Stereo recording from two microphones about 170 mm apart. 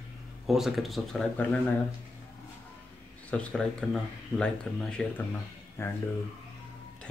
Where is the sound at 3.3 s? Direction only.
5° left (ahead or behind).